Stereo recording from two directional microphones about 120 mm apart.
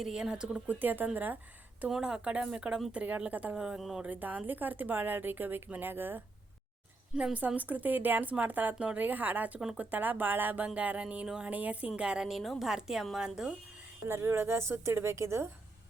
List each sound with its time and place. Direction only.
0.0 s speech: 5° right (ahead or behind)
14.1 s speech: 20° right (ahead or behind)